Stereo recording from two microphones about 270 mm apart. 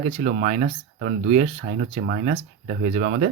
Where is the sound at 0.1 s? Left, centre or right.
Right.